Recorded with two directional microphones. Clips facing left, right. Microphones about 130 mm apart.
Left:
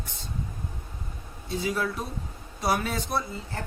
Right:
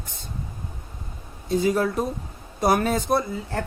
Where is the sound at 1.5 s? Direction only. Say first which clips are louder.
Right 7 dB; 45° right (ahead or behind).